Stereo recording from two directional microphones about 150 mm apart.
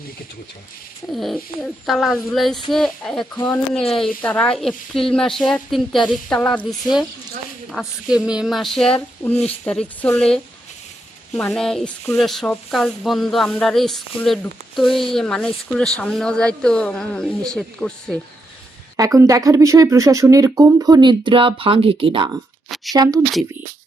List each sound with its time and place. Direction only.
1.1 s speech: centre (ahead or behind)
7.7 s speech: 5° right (ahead or behind)
9.0 s a sound: 15° left (ahead or behind)
10.2 s speech: 5° left (ahead or behind)
11.5 s speech: 5° left (ahead or behind)
18.9 s speech: 20° right (ahead or behind)